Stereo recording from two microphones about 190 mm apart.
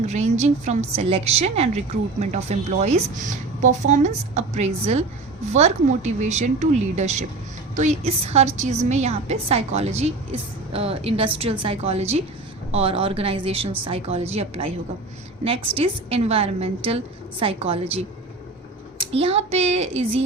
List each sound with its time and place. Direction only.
0.0 s a woman's voice: 35° right (ahead or behind)